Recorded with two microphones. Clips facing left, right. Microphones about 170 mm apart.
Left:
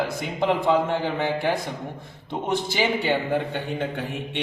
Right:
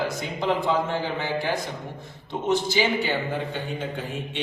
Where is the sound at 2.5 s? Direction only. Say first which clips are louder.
Right 3 dB; 55° left (ahead or behind).